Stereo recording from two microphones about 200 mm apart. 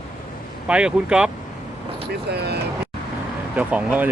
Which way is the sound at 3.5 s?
5° right (ahead or behind).